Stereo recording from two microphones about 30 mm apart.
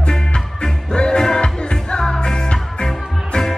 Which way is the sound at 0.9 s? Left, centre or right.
Left.